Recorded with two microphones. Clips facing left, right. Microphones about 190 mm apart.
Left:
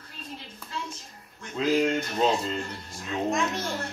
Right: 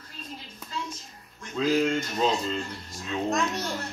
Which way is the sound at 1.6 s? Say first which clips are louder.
Right 1 dB; 20° left (ahead or behind).